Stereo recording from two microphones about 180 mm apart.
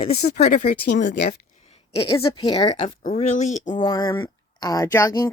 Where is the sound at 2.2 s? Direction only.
30° left (ahead or behind).